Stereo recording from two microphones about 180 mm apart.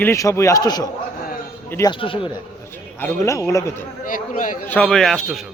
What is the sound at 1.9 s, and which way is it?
Speech, 30° left (ahead or behind).